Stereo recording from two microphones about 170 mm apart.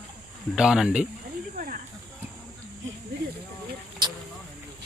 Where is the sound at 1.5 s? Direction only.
55° right (ahead or behind).